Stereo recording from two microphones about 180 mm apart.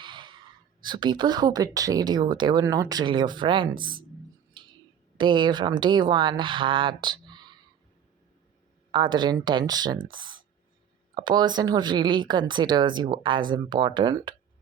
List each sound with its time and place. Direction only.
0.0 s whispering: 25° right (ahead or behind)
0.9 s speech: 25° right (ahead or behind)
4.6 s a sound: 25° right (ahead or behind)
5.1 s speech: 25° right (ahead or behind)
8.9 s speech: 25° right (ahead or behind)